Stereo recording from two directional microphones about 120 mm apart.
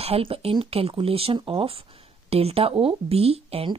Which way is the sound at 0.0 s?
50° right (ahead or behind).